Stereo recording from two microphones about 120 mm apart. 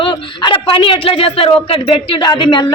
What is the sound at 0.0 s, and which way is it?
A man's voice, 40° left (ahead or behind).